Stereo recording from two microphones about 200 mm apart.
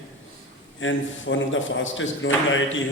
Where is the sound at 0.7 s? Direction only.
70° left (ahead or behind).